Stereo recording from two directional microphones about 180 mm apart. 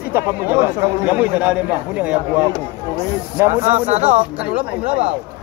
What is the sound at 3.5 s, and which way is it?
Speech, 40° right (ahead or behind).